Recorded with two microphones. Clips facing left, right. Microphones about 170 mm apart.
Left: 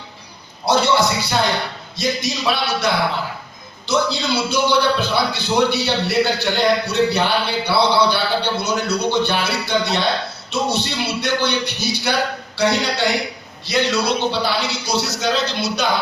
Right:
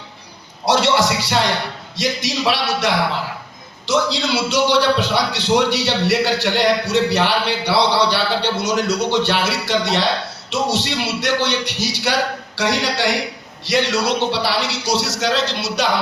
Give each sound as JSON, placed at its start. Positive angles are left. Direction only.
{"t": 0.7, "sound": "music", "side_deg": -90}
{"t": 2.0, "sound": "a man's voice", "side_deg": -90}
{"t": 4.1, "sound": "a man's voice", "side_deg": -90}